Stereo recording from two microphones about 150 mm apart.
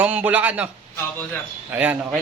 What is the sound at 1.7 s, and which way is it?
Speech, 10° right (ahead or behind).